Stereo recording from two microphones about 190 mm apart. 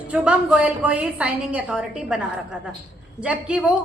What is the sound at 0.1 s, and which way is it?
A woman's voice, 5° right (ahead or behind).